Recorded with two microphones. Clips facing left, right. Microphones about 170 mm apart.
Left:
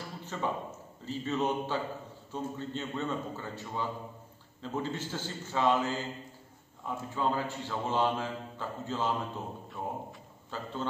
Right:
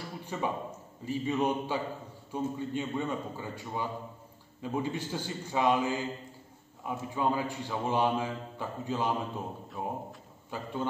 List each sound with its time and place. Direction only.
0.2 s a man's voice: 15° right (ahead or behind)